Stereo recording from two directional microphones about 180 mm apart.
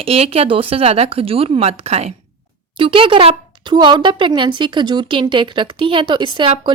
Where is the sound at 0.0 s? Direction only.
35° right (ahead or behind).